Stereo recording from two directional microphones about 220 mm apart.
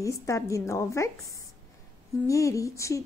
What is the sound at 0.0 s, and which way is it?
A woman's voice, 15° left (ahead or behind).